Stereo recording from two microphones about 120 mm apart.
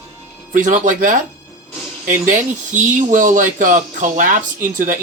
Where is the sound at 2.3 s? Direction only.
90° right.